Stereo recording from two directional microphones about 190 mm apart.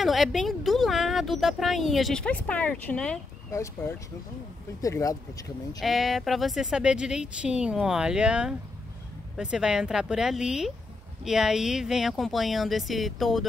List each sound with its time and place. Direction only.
0.0 s speech: centre (ahead or behind)
4.8 s speech: 15° left (ahead or behind)
5.8 s speech: centre (ahead or behind)